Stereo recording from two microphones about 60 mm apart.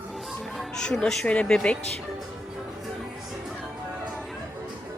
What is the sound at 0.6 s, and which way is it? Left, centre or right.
Speech, centre.